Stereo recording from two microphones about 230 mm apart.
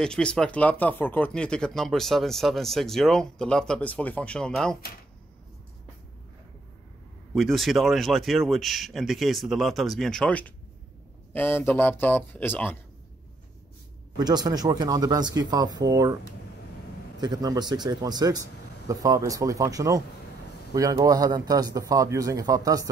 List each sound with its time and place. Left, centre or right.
0.0 s speech: centre
7.3 s speech: centre
14.1 s speech: centre
17.2 s speech: centre